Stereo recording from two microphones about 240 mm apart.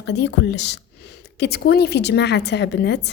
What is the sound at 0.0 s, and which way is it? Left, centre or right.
A woman's voice, left.